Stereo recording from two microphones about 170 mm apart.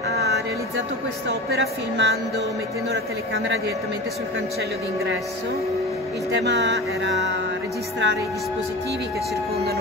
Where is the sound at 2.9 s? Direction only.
85° right.